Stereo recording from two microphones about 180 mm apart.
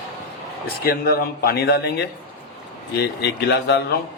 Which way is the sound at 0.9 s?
60° left (ahead or behind).